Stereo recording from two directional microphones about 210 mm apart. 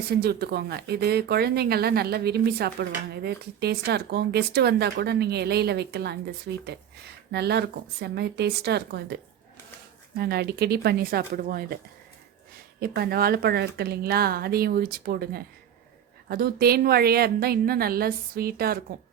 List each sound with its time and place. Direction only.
0.1 s speech: 50° right (ahead or behind)
10.2 s speech: 50° right (ahead or behind)
12.8 s speech: 45° right (ahead or behind)